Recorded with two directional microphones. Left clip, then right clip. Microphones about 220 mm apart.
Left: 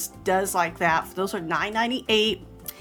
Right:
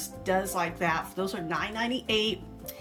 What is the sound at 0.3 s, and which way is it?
A woman's voice, 20° left (ahead or behind).